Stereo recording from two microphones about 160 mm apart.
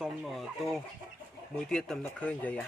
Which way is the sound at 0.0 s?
Centre (ahead or behind).